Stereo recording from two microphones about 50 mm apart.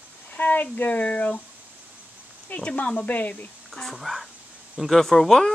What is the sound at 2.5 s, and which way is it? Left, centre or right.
Speech, left.